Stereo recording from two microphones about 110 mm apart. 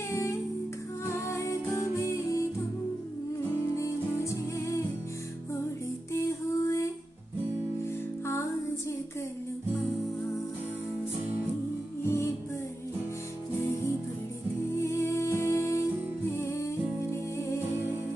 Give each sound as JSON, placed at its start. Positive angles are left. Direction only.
{"t": 0.1, "sound": "music", "side_deg": 25}
{"t": 3.7, "sound": "music", "side_deg": 25}
{"t": 6.1, "sound": "music", "side_deg": 25}
{"t": 12.0, "sound": "music", "side_deg": 25}
{"t": 14.8, "sound": "music", "side_deg": 25}